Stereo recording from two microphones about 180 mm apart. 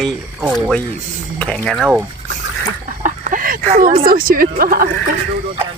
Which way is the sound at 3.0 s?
50° right (ahead or behind).